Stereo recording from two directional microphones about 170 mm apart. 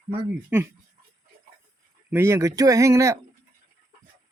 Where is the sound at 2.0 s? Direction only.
15° right (ahead or behind).